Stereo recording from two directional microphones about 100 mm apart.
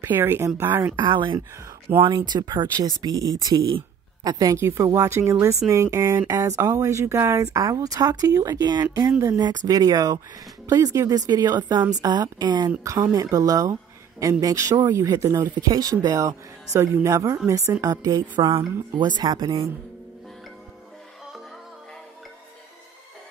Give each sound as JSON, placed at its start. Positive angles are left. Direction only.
{"t": 0.0, "sound": "speech", "side_deg": -20}
{"t": 0.9, "sound": "a woman's voice", "side_deg": -50}
{"t": 4.6, "sound": "speech", "side_deg": -25}
{"t": 15.4, "sound": "speech", "side_deg": -45}